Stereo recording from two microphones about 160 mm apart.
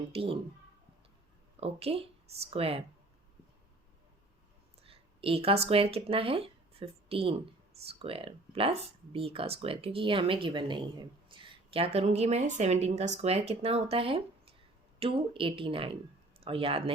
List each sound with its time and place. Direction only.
0.1 s speech: 35° right (ahead or behind)
1.5 s speech: 40° right (ahead or behind)
4.8 s speech: 35° right (ahead or behind)